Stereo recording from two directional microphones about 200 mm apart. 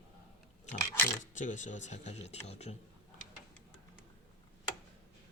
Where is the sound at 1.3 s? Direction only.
40° left (ahead or behind).